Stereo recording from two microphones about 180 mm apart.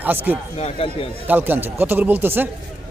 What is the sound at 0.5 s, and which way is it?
Speech, 35° left (ahead or behind).